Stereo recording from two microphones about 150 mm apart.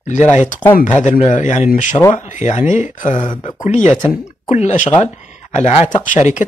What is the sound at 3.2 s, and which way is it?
Speech, 30° left (ahead or behind).